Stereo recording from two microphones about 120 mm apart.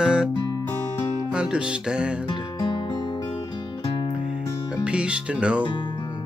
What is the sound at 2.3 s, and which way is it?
Music, 40° left (ahead or behind).